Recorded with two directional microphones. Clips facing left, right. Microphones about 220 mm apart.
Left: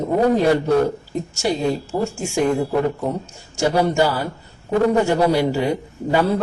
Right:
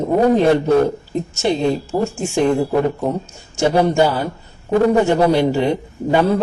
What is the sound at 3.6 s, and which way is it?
A man's voice, 25° right (ahead or behind).